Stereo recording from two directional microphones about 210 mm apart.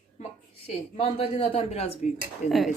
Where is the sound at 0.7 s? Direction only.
30° left (ahead or behind).